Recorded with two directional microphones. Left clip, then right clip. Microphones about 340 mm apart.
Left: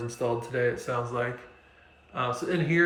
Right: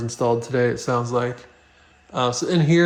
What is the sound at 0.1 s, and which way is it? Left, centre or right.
Speech, centre.